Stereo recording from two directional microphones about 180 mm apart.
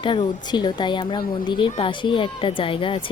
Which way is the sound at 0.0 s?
25° left (ahead or behind).